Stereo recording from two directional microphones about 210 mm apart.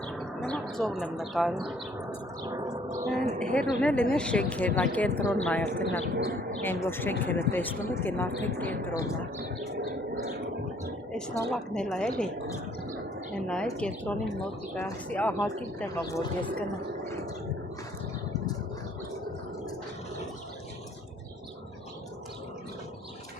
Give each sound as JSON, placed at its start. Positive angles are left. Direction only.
{"t": 0.4, "sound": "speech", "side_deg": 5}
{"t": 2.0, "sound": "bird", "side_deg": -15}
{"t": 3.2, "sound": "speech", "side_deg": -40}
{"t": 3.5, "sound": "speech", "side_deg": 5}
{"t": 11.5, "sound": "speech", "side_deg": 0}
{"t": 13.3, "sound": "speech", "side_deg": 5}